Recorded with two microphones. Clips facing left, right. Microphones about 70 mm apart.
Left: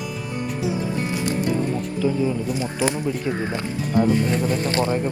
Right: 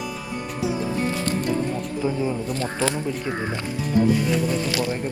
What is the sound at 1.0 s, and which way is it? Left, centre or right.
Music, centre.